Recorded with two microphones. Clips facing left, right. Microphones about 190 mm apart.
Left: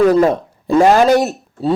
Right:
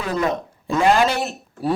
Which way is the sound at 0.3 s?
35° left (ahead or behind).